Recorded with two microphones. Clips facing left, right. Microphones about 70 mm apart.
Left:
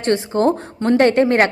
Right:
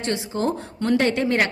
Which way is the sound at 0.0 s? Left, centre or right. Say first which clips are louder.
Left 8 dB; left.